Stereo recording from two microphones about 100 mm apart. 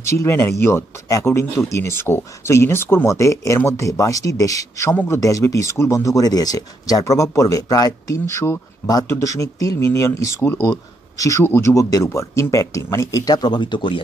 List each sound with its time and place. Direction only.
0.1 s speech: 30° left (ahead or behind)
8.8 s speech: 40° left (ahead or behind)